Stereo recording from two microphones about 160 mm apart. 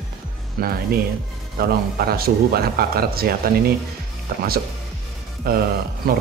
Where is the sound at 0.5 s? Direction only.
70° right (ahead or behind).